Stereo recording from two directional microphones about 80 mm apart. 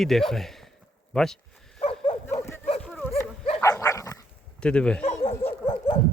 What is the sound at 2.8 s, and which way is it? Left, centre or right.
Dog, centre.